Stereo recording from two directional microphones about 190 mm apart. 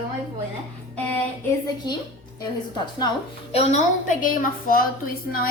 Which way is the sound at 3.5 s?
35° left (ahead or behind).